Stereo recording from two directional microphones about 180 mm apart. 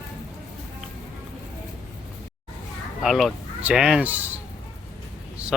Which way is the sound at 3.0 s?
Centre (ahead or behind).